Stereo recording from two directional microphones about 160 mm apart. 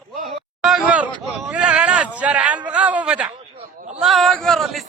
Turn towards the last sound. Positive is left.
turn(degrees=0)  # may be behind; listen again after turning